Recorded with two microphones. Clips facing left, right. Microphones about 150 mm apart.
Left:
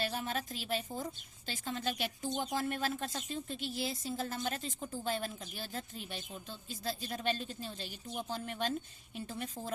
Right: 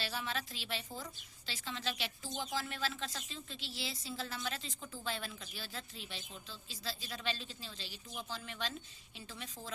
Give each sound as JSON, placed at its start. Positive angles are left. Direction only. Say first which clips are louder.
{"t": 0.0, "sound": "a woman's voice", "louder": "left 4 dB", "side_deg": 50}